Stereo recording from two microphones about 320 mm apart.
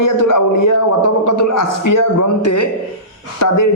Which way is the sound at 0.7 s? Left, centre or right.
Left.